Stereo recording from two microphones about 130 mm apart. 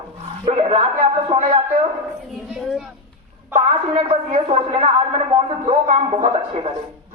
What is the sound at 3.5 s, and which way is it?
A woman's voice, 50° right (ahead or behind).